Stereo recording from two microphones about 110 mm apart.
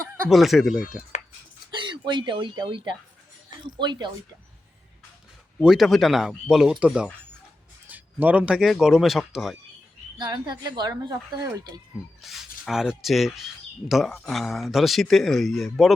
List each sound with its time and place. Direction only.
0.3 s speech: centre (ahead or behind)
1.7 s speech: 45° right (ahead or behind)
5.5 s speech: centre (ahead or behind)
10.2 s speech: 40° right (ahead or behind)
12.2 s speech: centre (ahead or behind)